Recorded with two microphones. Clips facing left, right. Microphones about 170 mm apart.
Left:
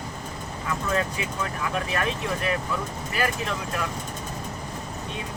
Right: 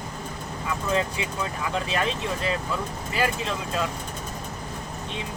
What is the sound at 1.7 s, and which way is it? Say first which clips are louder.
Speech: right 2 dB; 20° right (ahead or behind).